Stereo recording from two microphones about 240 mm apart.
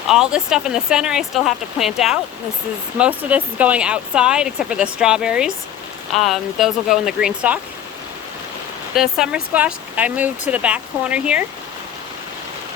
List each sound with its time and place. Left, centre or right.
0.1 s speech: centre
9.0 s speech: centre